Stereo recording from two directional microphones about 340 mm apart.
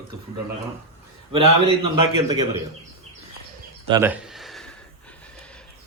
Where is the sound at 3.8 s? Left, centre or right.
Centre.